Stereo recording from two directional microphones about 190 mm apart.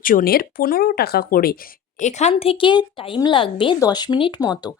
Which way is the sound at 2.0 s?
35° left (ahead or behind).